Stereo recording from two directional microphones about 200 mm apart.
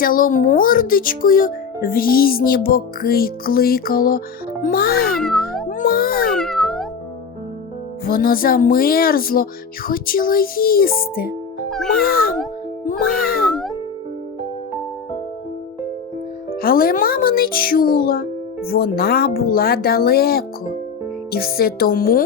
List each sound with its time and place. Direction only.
0.0 s speech: 45° left (ahead or behind)
5.2 s cat: centre (ahead or behind)
5.6 s cat: 45° left (ahead or behind)
6.3 s meow: centre (ahead or behind)
8.0 s speech: 45° left (ahead or behind)
12.8 s music: 45° left (ahead or behind)
16.6 s speech: 45° left (ahead or behind)